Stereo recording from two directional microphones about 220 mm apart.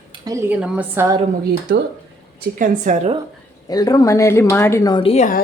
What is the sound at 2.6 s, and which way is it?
Speech, 30° right (ahead or behind).